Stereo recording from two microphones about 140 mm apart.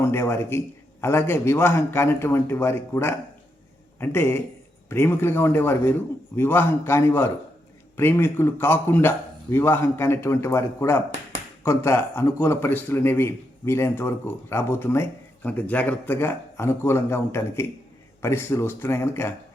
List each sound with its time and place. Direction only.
0.0 s speech: 20° left (ahead or behind)